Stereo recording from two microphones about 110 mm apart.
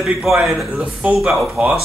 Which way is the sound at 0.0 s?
5° right (ahead or behind).